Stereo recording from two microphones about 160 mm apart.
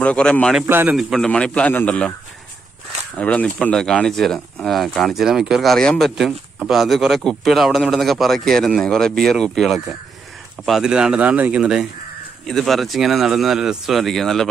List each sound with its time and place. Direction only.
0.0 s speech: 5° left (ahead or behind)
0.7 s a man's voice: 15° right (ahead or behind)
0.9 s a man's voice: centre (ahead or behind)
3.2 s speech: 5° left (ahead or behind)